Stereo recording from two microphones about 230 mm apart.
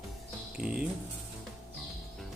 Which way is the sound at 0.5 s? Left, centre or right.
Centre.